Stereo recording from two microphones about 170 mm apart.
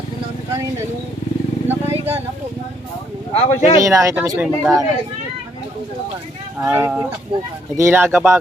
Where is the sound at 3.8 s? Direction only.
20° right (ahead or behind).